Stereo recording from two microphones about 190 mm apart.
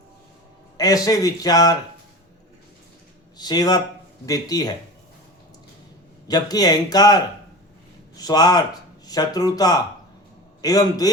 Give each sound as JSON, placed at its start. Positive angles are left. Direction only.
{"t": 0.8, "sound": "speech", "side_deg": 20}
{"t": 3.3, "sound": "speech", "side_deg": 20}
{"t": 6.2, "sound": "speech", "side_deg": 20}